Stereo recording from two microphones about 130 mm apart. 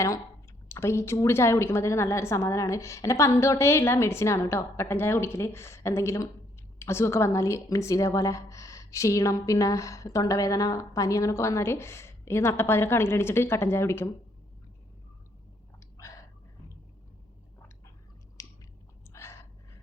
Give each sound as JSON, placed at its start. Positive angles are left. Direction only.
{"t": 0.7, "sound": "a woman's voice", "side_deg": 20}
{"t": 18.4, "sound": "chewing", "side_deg": 25}
{"t": 19.1, "sound": "gasp", "side_deg": 20}